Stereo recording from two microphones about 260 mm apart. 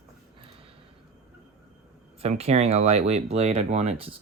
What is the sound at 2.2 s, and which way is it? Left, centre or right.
Speech, right.